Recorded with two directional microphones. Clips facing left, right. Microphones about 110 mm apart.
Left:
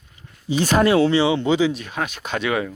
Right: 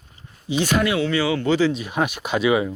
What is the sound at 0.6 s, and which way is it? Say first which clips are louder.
Speech: left 4 dB; 40° left (ahead or behind).